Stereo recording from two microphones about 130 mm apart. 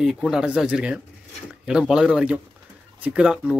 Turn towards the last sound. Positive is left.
turn(degrees=-5)  # may be behind; listen again after turning